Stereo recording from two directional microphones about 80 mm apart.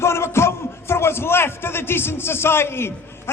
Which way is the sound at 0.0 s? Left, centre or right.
Left.